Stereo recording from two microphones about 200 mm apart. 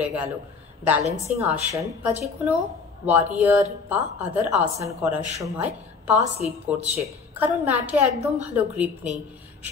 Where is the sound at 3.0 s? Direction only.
10° right (ahead or behind).